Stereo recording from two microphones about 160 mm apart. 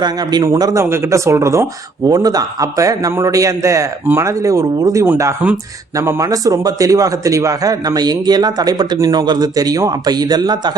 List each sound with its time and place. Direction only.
0.0 s speech: 25° right (ahead or behind)